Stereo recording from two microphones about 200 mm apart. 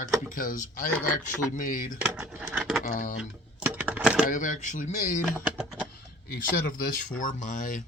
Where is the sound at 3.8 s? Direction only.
10° right (ahead or behind).